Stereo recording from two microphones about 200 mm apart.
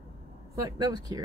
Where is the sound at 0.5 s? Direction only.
20° right (ahead or behind).